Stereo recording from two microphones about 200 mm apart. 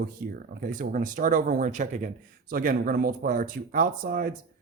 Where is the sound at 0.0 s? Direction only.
45° right (ahead or behind).